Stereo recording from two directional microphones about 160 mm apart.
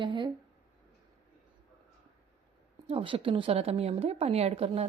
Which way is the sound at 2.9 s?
35° right (ahead or behind).